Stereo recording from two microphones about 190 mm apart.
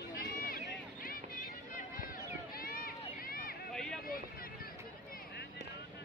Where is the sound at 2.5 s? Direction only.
50° left (ahead or behind).